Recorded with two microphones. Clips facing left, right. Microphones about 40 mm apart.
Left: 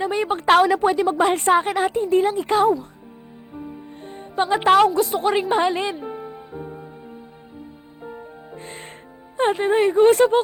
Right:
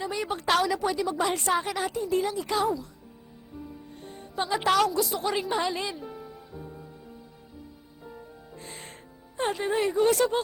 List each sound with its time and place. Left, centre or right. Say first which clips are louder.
0.0 s a woman's voice: left 8 dB; left
3.5 s music: left 7 dB; left
9.4 s a woman's voice: left 8 dB; left